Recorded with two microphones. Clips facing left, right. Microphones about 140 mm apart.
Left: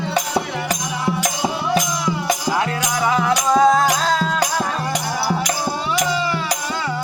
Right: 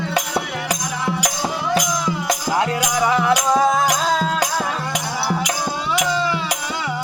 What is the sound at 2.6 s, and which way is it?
Music, 15° right (ahead or behind).